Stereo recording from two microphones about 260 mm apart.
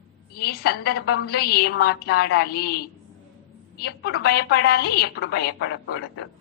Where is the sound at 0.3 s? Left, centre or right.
Left.